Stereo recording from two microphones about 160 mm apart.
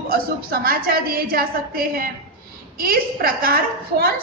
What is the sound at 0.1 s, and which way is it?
A woman's voice, 70° right (ahead or behind).